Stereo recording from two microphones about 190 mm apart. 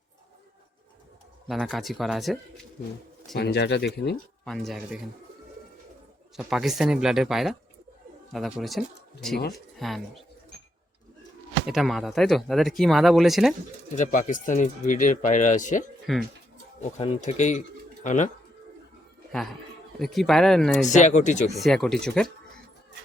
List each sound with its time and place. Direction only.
1.5 s speech: centre (ahead or behind)
3.3 s speech: 60° left (ahead or behind)
4.4 s speech: centre (ahead or behind)
6.5 s speech: centre (ahead or behind)
11.6 s speech: centre (ahead or behind)
13.9 s speech: 40° left (ahead or behind)
16.1 s speech: centre (ahead or behind)
17.0 s speech: 35° left (ahead or behind)
19.3 s a man's voice: centre (ahead or behind)
20.8 s speech: 40° left (ahead or behind)
21.5 s speech: centre (ahead or behind)